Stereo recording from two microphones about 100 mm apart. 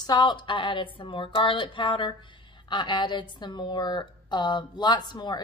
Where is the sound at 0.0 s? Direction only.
45° left (ahead or behind).